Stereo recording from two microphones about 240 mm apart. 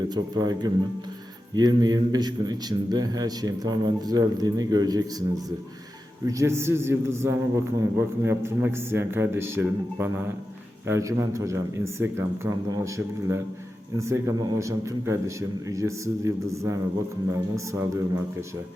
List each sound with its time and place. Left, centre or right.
0.1 s a man's voice: centre
6.2 s a man's voice: centre